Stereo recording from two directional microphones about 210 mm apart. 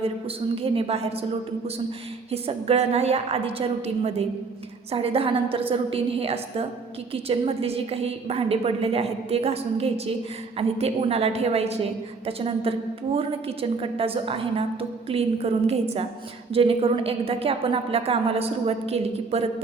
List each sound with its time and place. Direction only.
0.5 s a woman's voice: 25° right (ahead or behind)
2.3 s a woman's voice: 30° right (ahead or behind)